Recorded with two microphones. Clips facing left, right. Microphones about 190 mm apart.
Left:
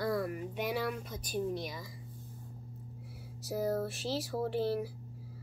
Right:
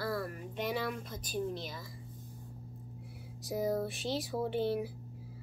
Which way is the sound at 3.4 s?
Centre (ahead or behind).